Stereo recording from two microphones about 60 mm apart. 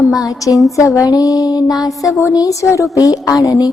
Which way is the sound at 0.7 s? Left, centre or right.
Left.